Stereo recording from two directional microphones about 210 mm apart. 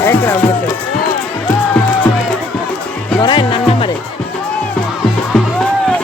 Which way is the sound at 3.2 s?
25° left (ahead or behind).